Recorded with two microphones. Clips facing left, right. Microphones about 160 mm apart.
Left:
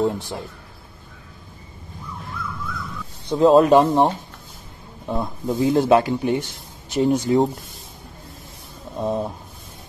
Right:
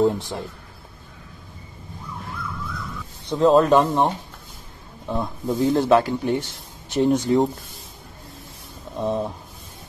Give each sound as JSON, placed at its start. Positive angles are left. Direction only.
{"t": 0.0, "sound": "speech", "side_deg": 0}
{"t": 3.3, "sound": "speech", "side_deg": 5}
{"t": 3.7, "sound": "speech", "side_deg": 15}
{"t": 5.0, "sound": "speech", "side_deg": 5}
{"t": 5.9, "sound": "speech", "side_deg": 20}
{"t": 6.9, "sound": "speech", "side_deg": 5}
{"t": 8.9, "sound": "speech", "side_deg": 5}